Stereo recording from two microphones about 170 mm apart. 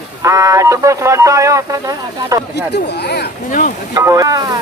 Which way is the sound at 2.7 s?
85° left.